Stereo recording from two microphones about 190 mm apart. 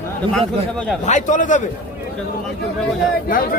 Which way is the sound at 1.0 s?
40° left (ahead or behind).